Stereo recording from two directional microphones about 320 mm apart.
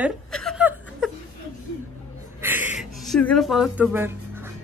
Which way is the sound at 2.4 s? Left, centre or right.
Centre.